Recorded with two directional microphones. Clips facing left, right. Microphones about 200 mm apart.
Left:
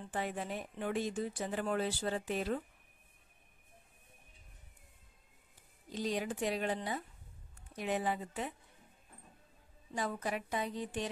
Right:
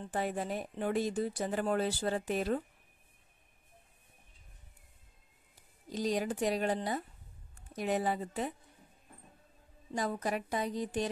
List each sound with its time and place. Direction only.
0.1 s speech: 40° right (ahead or behind)
5.9 s speech: 40° right (ahead or behind)
9.9 s speech: 40° right (ahead or behind)